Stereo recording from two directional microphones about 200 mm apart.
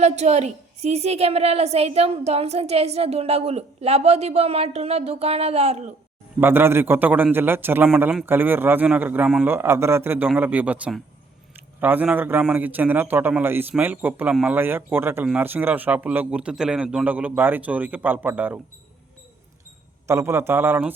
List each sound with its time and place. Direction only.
0.0 s a woman's voice: 35° right (ahead or behind)
6.4 s a man's voice: 10° right (ahead or behind)
20.1 s a man's voice: 15° right (ahead or behind)